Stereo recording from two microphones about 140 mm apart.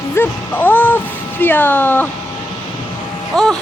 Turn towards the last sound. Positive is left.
turn(degrees=5)  # may be behind; listen again after turning